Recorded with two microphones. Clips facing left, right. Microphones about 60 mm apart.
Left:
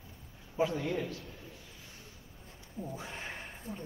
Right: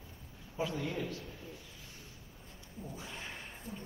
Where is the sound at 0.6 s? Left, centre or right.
Left.